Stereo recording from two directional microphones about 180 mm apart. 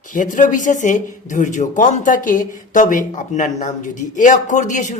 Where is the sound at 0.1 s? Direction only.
45° left (ahead or behind).